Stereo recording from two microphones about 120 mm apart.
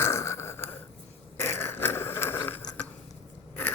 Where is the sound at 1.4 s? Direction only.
20° left (ahead or behind).